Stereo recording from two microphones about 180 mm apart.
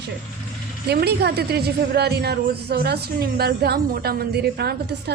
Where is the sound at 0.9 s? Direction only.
65° right (ahead or behind).